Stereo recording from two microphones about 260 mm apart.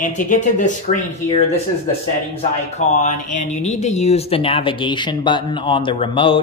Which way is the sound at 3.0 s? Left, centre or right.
Left.